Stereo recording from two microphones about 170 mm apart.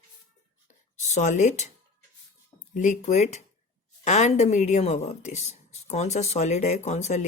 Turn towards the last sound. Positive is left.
turn(degrees=40)  # may be behind; listen again after turning